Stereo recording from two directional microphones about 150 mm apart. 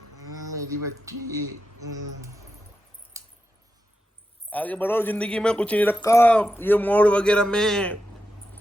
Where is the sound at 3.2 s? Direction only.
20° right (ahead or behind).